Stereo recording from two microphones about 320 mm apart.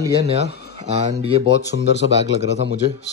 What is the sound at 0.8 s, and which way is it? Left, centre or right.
Speech, centre.